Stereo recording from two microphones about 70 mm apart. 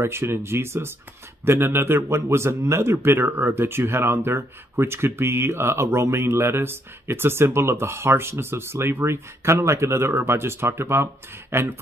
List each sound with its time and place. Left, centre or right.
0.0 s speech: right